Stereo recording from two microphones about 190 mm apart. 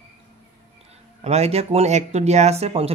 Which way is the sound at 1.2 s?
35° right (ahead or behind).